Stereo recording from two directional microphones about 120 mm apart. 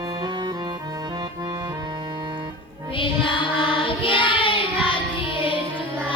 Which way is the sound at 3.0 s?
45° left (ahead or behind).